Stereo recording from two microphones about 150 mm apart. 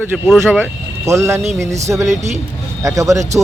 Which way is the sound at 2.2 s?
50° right (ahead or behind).